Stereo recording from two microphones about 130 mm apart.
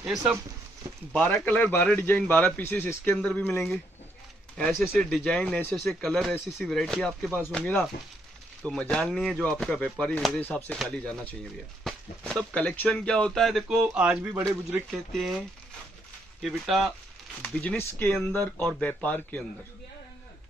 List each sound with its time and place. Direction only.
0.0 s speech: 5° right (ahead or behind)
0.8 s speech: 25° right (ahead or behind)
1.2 s speech: 15° left (ahead or behind); by 14.4 s 10° right (ahead or behind)
14.9 s speech: centre (ahead or behind)